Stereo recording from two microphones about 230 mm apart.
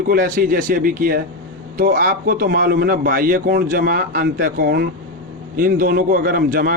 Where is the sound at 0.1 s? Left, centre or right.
Right.